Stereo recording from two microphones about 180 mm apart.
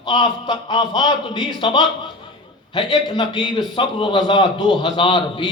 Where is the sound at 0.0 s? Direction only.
25° left (ahead or behind).